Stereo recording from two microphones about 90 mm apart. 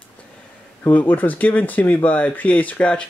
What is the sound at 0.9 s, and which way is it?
Speech, 20° left (ahead or behind).